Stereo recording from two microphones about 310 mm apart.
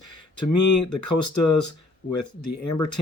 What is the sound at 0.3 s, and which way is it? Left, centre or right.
Speech, left.